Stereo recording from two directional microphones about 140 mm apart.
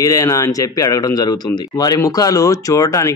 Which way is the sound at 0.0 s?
25° left (ahead or behind).